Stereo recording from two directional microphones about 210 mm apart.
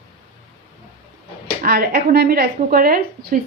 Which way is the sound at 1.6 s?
45° right (ahead or behind).